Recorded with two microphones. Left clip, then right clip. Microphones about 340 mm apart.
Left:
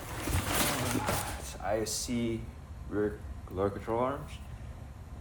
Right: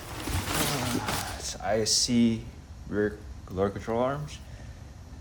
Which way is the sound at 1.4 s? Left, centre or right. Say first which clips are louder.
Right 7 dB; right.